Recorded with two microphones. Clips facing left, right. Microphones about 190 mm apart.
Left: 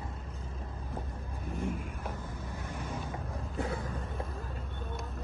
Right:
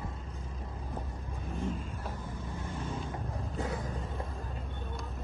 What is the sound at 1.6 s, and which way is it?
Vehicle, 15° left (ahead or behind).